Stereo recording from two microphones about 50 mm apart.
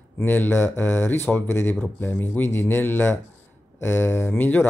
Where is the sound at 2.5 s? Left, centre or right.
Left.